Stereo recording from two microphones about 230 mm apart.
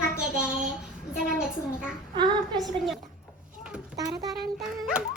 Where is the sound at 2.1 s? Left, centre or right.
Centre.